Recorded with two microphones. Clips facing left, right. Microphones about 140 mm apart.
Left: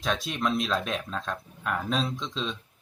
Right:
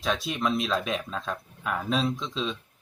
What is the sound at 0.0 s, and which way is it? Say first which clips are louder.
Speech: right 1 dB; centre (ahead or behind).